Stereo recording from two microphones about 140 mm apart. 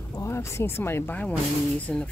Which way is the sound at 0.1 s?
20° left (ahead or behind).